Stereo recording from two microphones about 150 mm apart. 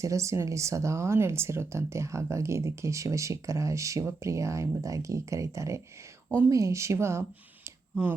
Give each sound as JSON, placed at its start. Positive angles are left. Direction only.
{"t": 0.0, "sound": "speech", "side_deg": -20}